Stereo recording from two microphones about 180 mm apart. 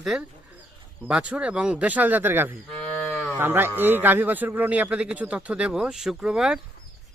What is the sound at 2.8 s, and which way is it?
Cattle, 5° left (ahead or behind).